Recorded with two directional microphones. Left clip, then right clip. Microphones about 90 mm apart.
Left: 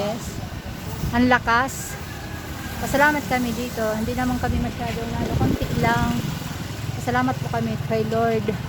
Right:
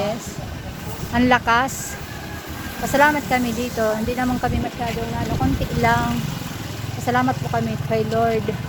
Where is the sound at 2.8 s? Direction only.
Centre (ahead or behind).